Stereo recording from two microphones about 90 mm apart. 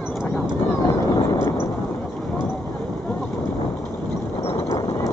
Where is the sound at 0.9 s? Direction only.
30° left (ahead or behind).